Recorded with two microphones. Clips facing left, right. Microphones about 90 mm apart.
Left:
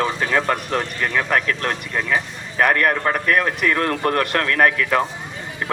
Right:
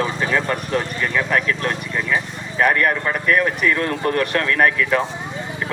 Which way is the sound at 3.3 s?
45° left (ahead or behind).